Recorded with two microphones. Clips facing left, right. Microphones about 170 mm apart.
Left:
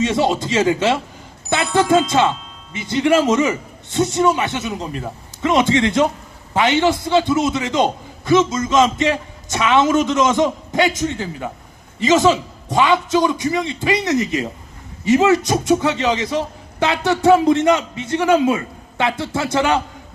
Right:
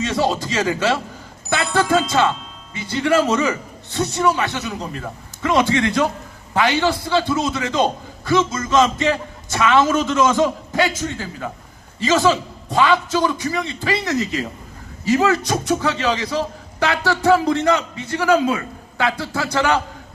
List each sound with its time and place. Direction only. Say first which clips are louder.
0.0 s a man's voice: left 3 dB; 20° left (ahead or behind)